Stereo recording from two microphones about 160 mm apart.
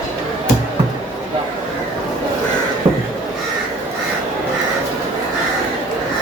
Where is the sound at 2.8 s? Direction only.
45° right (ahead or behind).